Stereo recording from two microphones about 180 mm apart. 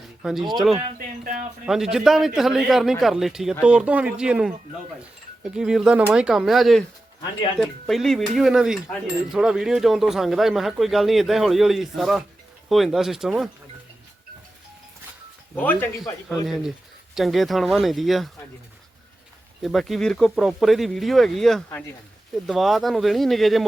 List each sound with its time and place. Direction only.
0.2 s speech: centre (ahead or behind)
0.9 s speech: 50° right (ahead or behind)
1.6 s speech: 5° right (ahead or behind)
15.5 s speech: 10° left (ahead or behind)
17.2 s speech: centre (ahead or behind)
19.6 s speech: centre (ahead or behind)